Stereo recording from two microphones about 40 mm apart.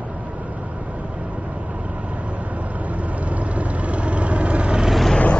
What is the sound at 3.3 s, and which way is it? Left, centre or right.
Vehicle, right.